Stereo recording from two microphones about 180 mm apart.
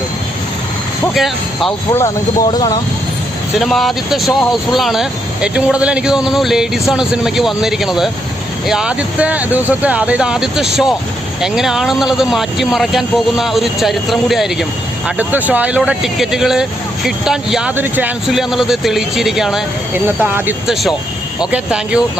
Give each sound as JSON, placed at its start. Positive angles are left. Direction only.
{"t": 1.0, "sound": "speech", "side_deg": 0}
{"t": 1.9, "sound": "speech", "side_deg": 15}
{"t": 3.6, "sound": "speech", "side_deg": 0}